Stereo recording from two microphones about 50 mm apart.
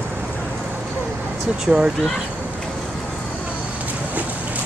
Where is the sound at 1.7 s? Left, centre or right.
Centre.